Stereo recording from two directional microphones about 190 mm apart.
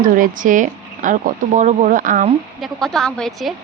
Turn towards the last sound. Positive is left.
turn(degrees=0)  # may be behind; listen again after turning